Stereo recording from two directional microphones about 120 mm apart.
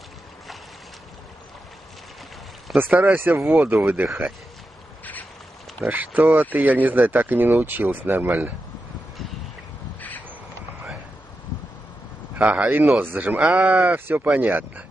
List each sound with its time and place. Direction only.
2.8 s speech: 15° right (ahead or behind)
5.9 s speech: 15° right (ahead or behind)
9.9 s a sound: 15° left (ahead or behind)
12.4 s speech: 10° right (ahead or behind)